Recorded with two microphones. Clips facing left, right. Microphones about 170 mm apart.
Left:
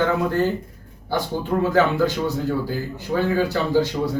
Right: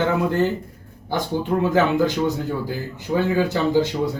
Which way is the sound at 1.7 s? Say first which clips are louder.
Even; 20° right (ahead or behind).